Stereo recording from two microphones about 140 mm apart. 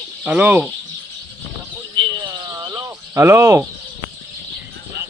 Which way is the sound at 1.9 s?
30° right (ahead or behind).